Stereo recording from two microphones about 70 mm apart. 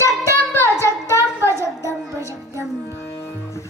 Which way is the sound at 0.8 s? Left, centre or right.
Right.